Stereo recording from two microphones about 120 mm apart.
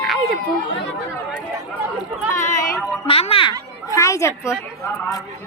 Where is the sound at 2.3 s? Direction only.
90° left.